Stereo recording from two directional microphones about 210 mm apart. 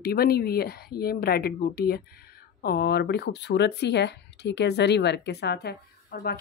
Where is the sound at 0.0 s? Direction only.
45° left (ahead or behind).